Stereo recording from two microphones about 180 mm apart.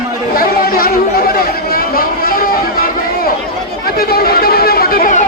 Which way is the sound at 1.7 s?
55° left (ahead or behind).